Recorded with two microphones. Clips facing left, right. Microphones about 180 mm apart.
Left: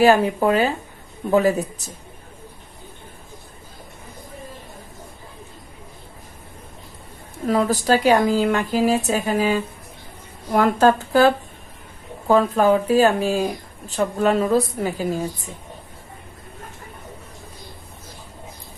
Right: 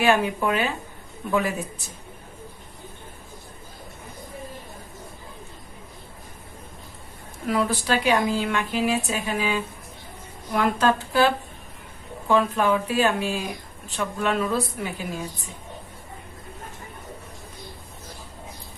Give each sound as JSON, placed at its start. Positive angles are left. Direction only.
{"t": 0.0, "sound": "speech", "side_deg": 35}
{"t": 7.4, "sound": "a woman's voice", "side_deg": 40}